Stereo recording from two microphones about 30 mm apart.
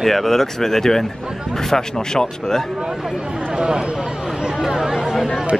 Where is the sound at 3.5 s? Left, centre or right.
Right.